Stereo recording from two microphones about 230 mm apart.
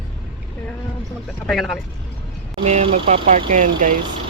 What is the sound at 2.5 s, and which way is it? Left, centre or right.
Speech, right.